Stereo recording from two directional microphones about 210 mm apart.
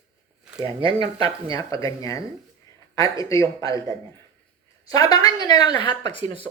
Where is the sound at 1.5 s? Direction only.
15° left (ahead or behind).